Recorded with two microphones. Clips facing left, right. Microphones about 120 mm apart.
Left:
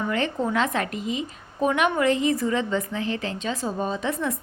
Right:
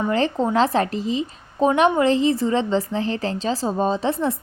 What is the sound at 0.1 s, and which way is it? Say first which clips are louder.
A woman's voice: right 5 dB; 30° right (ahead or behind).